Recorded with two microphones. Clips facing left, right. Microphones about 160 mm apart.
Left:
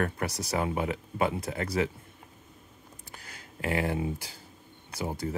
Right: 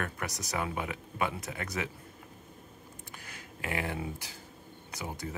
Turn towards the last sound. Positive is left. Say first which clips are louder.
# left 6 dB
turn(degrees=30)  # may be behind; listen again after turning